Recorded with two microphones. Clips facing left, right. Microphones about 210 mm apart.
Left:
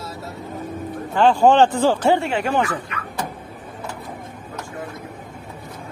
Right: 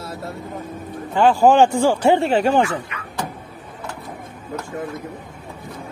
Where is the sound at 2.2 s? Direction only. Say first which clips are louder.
Right 4 dB; 35° right (ahead or behind).